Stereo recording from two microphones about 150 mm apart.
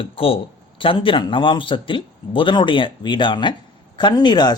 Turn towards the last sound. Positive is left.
turn(degrees=30)  # may be behind; listen again after turning